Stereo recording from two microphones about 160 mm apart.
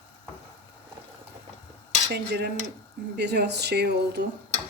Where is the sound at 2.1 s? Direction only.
90° right.